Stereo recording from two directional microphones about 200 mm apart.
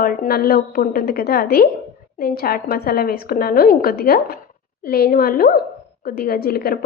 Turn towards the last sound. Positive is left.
turn(degrees=50)  # may be behind; listen again after turning